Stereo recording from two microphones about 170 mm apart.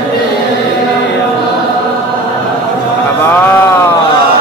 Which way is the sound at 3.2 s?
10° left (ahead or behind).